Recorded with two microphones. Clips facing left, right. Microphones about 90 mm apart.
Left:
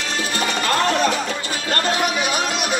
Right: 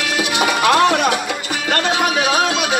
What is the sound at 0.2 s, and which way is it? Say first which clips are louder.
Music: right 6 dB; 85° right.